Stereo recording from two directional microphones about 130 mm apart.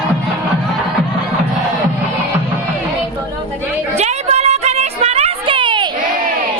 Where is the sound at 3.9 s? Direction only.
60° right (ahead or behind); by 5.9 s 40° right (ahead or behind).